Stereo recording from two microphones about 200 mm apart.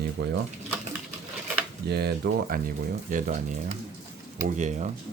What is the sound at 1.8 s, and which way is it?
Speech, 55° right (ahead or behind).